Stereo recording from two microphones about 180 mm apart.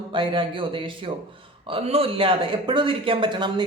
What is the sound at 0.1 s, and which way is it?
Speech, 30° right (ahead or behind).